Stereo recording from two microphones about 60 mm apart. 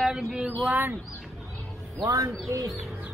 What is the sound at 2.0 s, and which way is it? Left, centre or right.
Speech, right.